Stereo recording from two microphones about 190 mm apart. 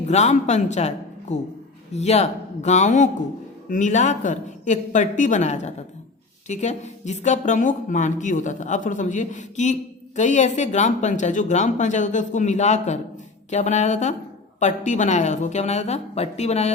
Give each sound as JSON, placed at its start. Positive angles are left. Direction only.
{"t": 0.1, "sound": "a woman's voice", "side_deg": 35}